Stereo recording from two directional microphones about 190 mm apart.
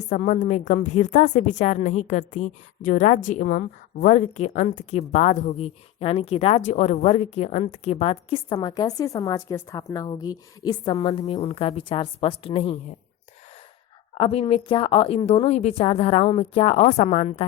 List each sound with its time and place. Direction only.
0.1 s a woman's voice: 40° left (ahead or behind)
14.2 s a woman's voice: 30° left (ahead or behind)